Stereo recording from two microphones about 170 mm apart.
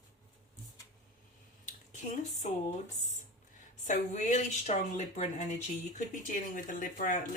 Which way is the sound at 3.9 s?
45° left (ahead or behind).